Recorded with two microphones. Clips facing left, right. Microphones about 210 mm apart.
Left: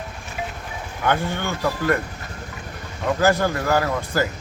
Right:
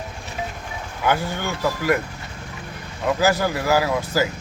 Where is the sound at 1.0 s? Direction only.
5° right (ahead or behind).